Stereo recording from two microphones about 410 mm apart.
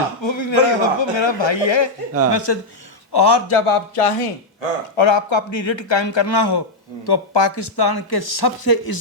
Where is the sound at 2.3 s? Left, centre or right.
Left.